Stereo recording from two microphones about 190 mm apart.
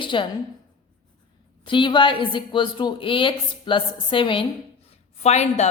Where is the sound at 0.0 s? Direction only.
25° left (ahead or behind).